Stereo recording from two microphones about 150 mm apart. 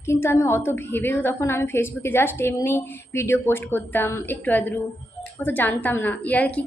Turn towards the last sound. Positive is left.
turn(degrees=10)  # may be behind; listen again after turning